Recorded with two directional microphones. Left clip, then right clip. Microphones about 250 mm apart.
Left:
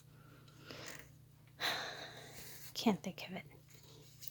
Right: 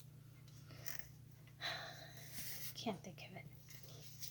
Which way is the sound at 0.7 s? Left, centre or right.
Left.